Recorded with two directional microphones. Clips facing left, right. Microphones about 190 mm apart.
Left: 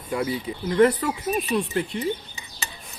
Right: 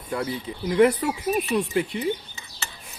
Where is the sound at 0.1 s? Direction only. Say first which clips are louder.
Left 2 dB; 10° left (ahead or behind).